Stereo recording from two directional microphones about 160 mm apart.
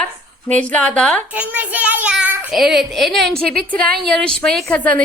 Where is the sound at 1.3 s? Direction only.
10° right (ahead or behind); by 5.0 s 10° left (ahead or behind).